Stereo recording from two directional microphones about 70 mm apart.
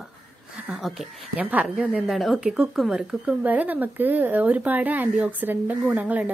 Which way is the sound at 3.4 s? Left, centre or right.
Right.